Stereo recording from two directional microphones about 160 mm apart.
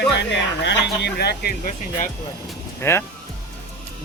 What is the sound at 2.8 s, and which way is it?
Speech, 15° left (ahead or behind).